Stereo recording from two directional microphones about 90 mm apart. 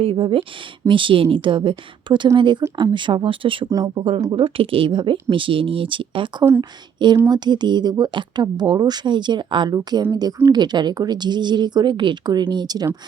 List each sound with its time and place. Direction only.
0.0 s speech: 90° right
0.9 s speech: 70° right (ahead or behind)
3.7 s speech: 45° right (ahead or behind)
4.3 s speech: 80° right
6.6 s speech: 55° right (ahead or behind)
10.1 s speech: 45° right (ahead or behind)